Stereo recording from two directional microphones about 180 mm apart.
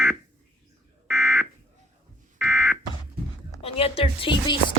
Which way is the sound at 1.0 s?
15° right (ahead or behind).